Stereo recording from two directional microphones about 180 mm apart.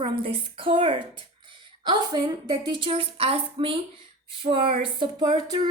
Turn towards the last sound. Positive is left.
turn(degrees=-25)  # may be behind; listen again after turning